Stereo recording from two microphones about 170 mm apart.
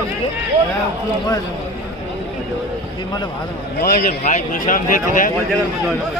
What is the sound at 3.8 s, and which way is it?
Speech, 60° left (ahead or behind).